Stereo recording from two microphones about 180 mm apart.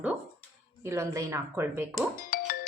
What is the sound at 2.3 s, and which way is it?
Music, 50° left (ahead or behind).